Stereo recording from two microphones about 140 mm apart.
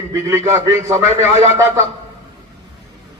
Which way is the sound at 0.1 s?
20° right (ahead or behind).